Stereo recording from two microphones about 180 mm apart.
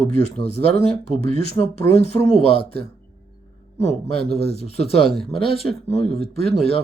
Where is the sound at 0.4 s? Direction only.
35° left (ahead or behind).